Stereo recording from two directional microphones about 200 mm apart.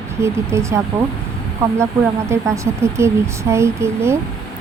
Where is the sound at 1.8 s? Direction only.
15° right (ahead or behind).